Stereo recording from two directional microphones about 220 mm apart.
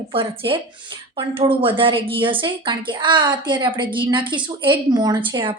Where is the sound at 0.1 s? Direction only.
25° right (ahead or behind).